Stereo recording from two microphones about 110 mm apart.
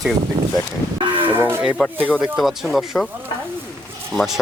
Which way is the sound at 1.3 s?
20° right (ahead or behind).